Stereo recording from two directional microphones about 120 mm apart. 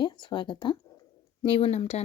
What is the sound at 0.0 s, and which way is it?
Speech, 40° left (ahead or behind).